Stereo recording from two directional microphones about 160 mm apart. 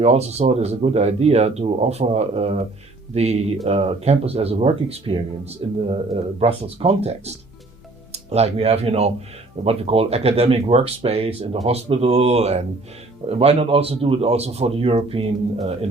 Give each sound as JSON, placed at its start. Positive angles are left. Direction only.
{"t": 0.0, "sound": "speech", "side_deg": -40}